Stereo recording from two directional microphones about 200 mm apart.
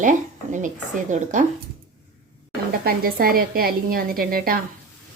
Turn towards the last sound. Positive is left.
turn(degrees=-45)  # may be behind; listen again after turning